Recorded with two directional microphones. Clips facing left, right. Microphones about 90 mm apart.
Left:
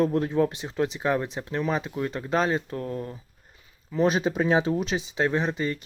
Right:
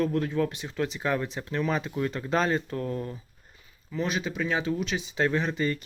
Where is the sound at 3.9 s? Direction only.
35° left (ahead or behind).